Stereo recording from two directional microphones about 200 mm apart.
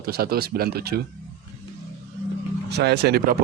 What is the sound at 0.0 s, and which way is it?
Speech, 50° right (ahead or behind).